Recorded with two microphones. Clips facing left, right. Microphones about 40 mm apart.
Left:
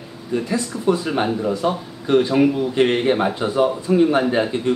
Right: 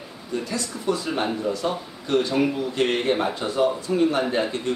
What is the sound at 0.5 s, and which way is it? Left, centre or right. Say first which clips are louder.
Speech: left 6 dB; centre.